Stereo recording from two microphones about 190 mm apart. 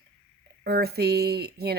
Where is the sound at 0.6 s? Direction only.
55° right (ahead or behind).